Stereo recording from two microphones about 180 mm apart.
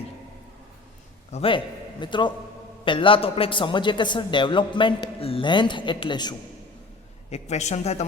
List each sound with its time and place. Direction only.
1.3 s a man's voice: 30° left (ahead or behind)
7.3 s speech: 40° left (ahead or behind)